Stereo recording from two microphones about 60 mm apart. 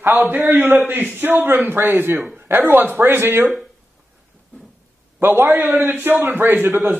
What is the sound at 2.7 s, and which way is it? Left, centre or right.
Speech, right.